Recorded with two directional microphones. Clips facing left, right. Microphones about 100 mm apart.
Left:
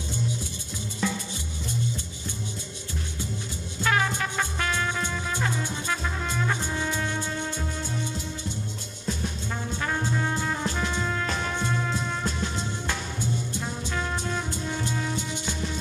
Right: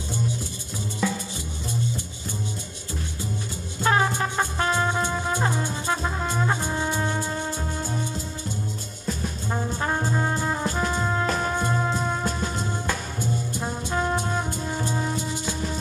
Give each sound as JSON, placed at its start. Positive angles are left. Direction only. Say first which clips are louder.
{"t": 3.8, "sound": "music", "louder": "right 3 dB", "side_deg": -30}
{"t": 9.5, "sound": "trombone", "louder": "right 5 dB", "side_deg": -30}
{"t": 10.6, "sound": "music", "louder": "right 3 dB", "side_deg": -40}
{"t": 11.7, "sound": "music", "louder": "right 4 dB", "side_deg": -30}
{"t": 13.6, "sound": "brass instrument", "louder": "right 4 dB", "side_deg": -30}
{"t": 14.1, "sound": "music", "louder": "right 4 dB", "side_deg": -40}